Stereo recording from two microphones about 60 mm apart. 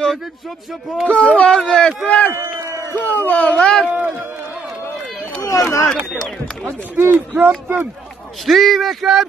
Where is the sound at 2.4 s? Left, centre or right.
Right.